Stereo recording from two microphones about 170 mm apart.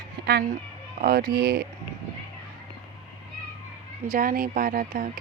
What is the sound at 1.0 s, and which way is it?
Speech, 65° right (ahead or behind).